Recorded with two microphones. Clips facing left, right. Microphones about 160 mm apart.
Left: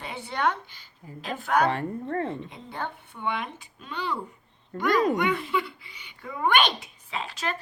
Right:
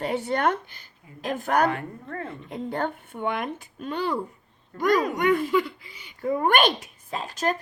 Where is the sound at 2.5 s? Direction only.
50° right (ahead or behind).